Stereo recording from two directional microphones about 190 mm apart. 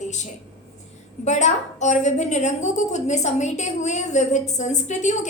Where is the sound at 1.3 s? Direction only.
40° left (ahead or behind).